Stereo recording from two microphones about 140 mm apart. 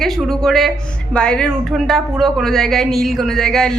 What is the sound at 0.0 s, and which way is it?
Speech, centre (ahead or behind).